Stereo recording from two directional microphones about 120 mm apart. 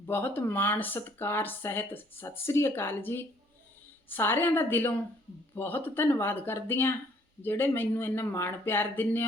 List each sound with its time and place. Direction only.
0.0 s speech: 15° left (ahead or behind)